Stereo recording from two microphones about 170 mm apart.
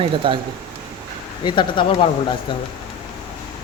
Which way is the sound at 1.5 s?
30° left (ahead or behind).